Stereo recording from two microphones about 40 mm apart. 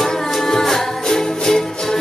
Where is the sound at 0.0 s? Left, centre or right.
Centre.